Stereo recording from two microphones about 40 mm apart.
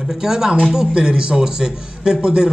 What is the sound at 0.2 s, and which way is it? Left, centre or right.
A man's voice, centre.